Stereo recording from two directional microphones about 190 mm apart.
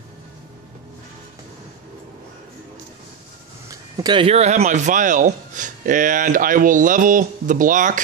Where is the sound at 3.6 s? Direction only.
20° right (ahead or behind); by 8.0 s 45° right (ahead or behind).